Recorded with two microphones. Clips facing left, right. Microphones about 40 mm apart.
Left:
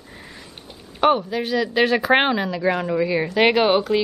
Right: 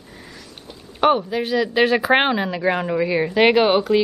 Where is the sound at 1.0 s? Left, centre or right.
Centre.